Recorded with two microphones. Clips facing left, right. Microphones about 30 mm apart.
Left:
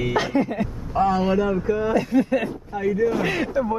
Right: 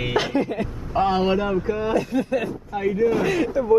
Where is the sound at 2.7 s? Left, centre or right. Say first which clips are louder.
Right 1 dB; right.